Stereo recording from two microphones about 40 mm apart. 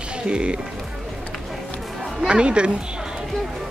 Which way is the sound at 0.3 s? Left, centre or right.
Right.